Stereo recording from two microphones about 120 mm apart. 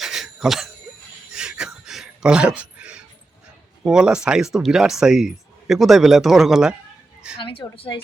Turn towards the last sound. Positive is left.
turn(degrees=50)  # may be behind; listen again after turning